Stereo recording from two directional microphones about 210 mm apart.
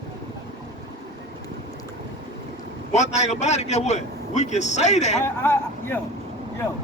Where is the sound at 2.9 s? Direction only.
35° left (ahead or behind).